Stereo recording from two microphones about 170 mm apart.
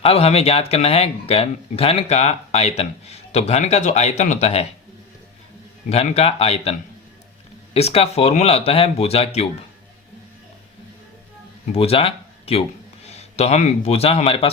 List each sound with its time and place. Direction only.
0.0 s speech: 35° left (ahead or behind)
5.9 s speech: 35° left (ahead or behind)
11.6 s a man's voice: 35° left (ahead or behind)